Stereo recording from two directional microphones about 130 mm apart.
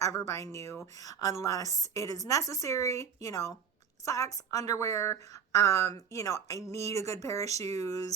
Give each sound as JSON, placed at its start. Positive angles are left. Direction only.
{"t": 0.0, "sound": "a woman's voice", "side_deg": 20}